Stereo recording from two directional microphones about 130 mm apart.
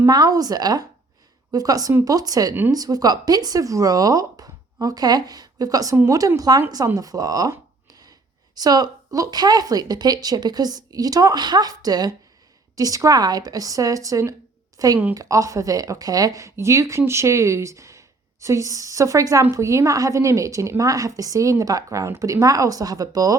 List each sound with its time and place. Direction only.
0.1 s a woman's voice: 30° right (ahead or behind)